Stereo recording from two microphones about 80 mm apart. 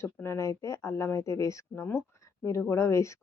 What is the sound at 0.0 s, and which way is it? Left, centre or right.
Speech, left.